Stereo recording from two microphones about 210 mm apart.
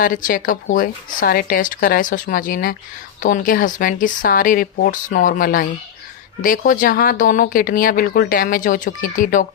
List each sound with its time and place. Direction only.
0.0 s speech: 40° left (ahead or behind)